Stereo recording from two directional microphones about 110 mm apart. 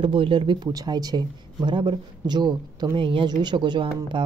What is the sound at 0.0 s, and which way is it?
Speech, 55° right (ahead or behind).